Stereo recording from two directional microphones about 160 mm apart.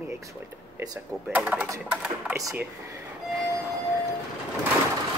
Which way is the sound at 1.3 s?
10° right (ahead or behind).